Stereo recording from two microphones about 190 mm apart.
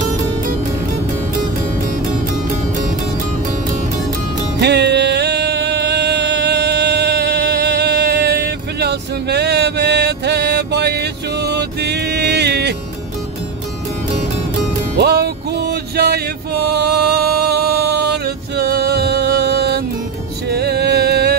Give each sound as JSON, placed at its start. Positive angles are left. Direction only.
{"t": 4.6, "sound": "music", "side_deg": -60}
{"t": 15.0, "sound": "music", "side_deg": -60}